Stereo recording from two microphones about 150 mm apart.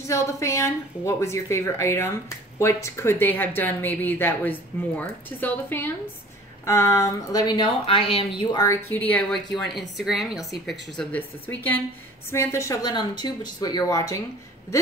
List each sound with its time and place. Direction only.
0.0 s a woman's voice: 20° left (ahead or behind); by 8.5 s 40° left (ahead or behind)
8.5 s a woman's voice: 20° left (ahead or behind)
8.9 s speech: 10° left (ahead or behind)
9.3 s speech: centre (ahead or behind)
11.1 s a woman's voice: 10° left (ahead or behind)